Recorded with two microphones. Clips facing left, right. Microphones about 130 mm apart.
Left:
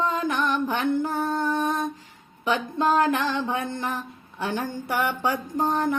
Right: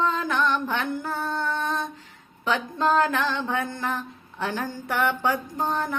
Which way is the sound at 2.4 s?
15° left (ahead or behind).